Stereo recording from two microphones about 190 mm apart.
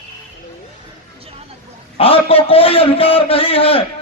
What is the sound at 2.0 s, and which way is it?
A man's voice, 30° left (ahead or behind).